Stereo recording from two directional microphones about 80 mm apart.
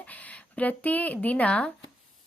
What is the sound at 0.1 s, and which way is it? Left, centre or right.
Speech, centre.